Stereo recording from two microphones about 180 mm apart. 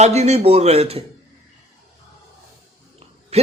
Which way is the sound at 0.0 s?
40° right (ahead or behind).